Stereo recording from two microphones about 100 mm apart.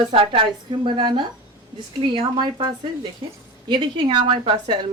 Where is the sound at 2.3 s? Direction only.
50° right (ahead or behind).